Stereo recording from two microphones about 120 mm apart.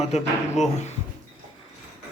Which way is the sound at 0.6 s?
70° left (ahead or behind).